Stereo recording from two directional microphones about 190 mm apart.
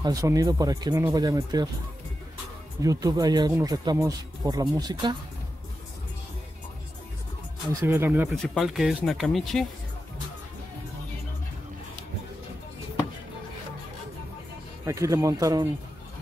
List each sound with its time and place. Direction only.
0.0 s speech: 20° right (ahead or behind)
2.8 s speech: 20° right (ahead or behind)
7.8 s speech: 10° right (ahead or behind)
8.4 s speech: centre (ahead or behind)
14.9 s speech: 15° right (ahead or behind)